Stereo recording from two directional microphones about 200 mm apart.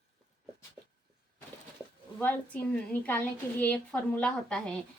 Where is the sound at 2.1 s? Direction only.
5° left (ahead or behind).